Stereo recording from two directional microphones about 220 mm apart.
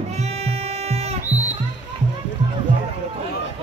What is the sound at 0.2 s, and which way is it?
Music, 30° right (ahead or behind).